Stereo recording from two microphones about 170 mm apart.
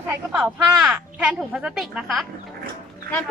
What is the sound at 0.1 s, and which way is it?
A woman's voice, 5° right (ahead or behind).